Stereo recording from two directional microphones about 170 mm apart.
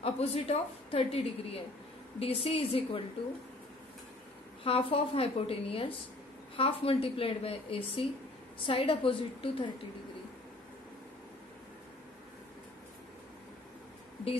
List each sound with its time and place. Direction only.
0.0 s speech: 35° left (ahead or behind)
4.6 s speech: 35° left (ahead or behind)